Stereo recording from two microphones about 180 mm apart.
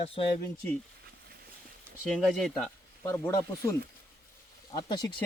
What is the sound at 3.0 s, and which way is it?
Speech, 15° left (ahead or behind).